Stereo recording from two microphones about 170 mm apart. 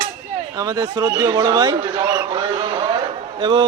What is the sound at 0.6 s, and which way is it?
Speech, 20° right (ahead or behind).